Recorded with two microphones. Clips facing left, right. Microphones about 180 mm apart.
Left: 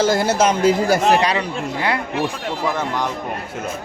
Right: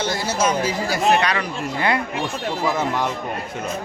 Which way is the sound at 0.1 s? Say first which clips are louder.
Left 5 dB; 55° left (ahead or behind).